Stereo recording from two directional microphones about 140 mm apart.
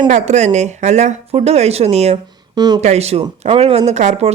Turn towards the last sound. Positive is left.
turn(degrees=-50)  # may be behind; listen again after turning